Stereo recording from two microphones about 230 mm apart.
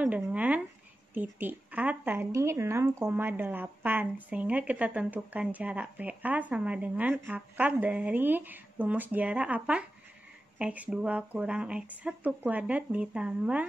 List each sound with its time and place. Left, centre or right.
0.0 s speech: centre